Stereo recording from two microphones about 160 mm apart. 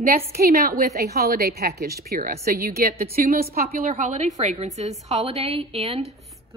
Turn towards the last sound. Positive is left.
turn(degrees=-40)  # may be behind; listen again after turning